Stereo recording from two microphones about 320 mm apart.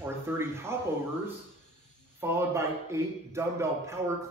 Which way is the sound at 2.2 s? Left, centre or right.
Centre.